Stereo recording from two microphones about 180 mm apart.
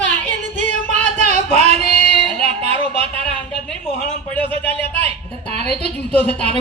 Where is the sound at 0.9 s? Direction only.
40° right (ahead or behind).